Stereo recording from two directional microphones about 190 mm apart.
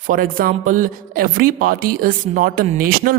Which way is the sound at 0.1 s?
45° right (ahead or behind).